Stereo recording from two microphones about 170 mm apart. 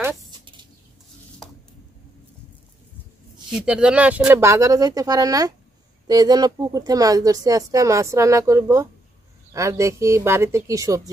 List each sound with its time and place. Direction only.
0.3 s bird: 25° right (ahead or behind)
3.5 s speech: 5° right (ahead or behind)